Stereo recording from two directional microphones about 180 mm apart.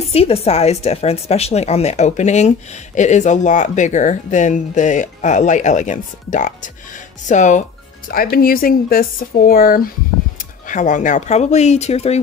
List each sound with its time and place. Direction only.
0.1 s a woman's voice: 35° left (ahead or behind)
8.1 s a woman's voice: 55° left (ahead or behind); by 12.2 s 35° left (ahead or behind)